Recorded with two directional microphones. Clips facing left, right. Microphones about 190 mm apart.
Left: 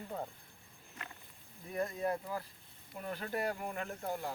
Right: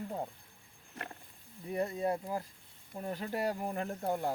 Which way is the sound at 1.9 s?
25° right (ahead or behind).